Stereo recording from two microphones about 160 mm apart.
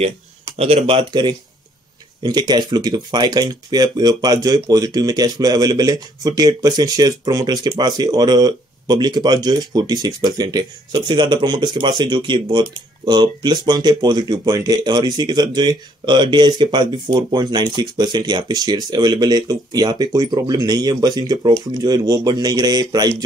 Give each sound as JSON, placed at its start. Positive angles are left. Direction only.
{"t": 0.6, "sound": "speech", "side_deg": -40}